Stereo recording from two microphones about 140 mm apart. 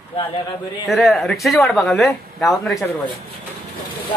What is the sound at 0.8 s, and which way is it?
Speech, centre (ahead or behind).